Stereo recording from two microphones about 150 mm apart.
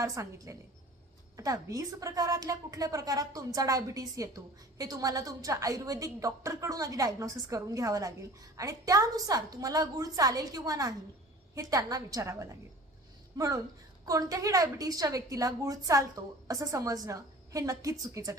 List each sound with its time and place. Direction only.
0.0 s a woman's voice: 20° right (ahead or behind)